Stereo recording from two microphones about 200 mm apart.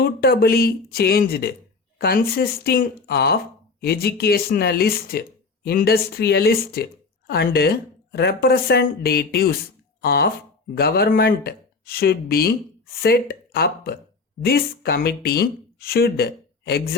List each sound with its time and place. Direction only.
0.0 s a woman's voice: 50° left (ahead or behind)